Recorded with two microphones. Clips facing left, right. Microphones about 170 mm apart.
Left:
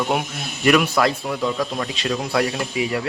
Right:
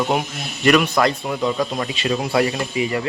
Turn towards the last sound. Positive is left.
turn(degrees=0)  # may be behind; listen again after turning